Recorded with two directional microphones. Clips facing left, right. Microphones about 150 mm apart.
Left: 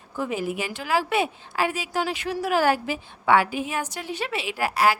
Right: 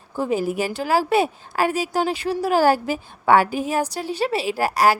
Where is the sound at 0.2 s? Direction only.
35° right (ahead or behind).